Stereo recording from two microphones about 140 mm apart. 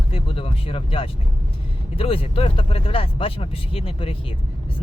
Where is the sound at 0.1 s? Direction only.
45° left (ahead or behind).